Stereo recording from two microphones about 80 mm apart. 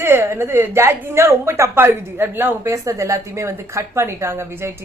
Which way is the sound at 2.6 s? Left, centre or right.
Right.